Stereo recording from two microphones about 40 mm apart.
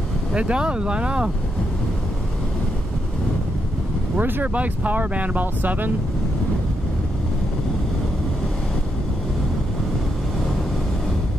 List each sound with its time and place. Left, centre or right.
0.3 s speech: right
4.2 s speech: right
4.6 s speech: right